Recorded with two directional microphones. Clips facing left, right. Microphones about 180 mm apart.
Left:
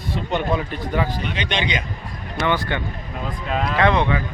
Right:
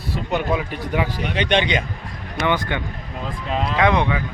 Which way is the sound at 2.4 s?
15° right (ahead or behind).